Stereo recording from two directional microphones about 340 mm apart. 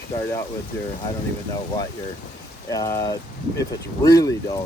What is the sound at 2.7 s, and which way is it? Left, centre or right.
Speech, centre.